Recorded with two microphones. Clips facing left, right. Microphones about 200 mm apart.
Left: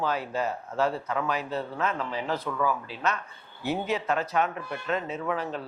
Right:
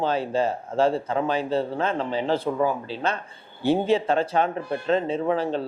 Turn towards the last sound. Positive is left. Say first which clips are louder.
# right 7 dB
turn(degrees=-30)  # may be behind; listen again after turning